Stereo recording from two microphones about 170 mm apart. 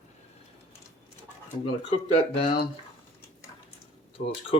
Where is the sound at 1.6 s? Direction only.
35° left (ahead or behind).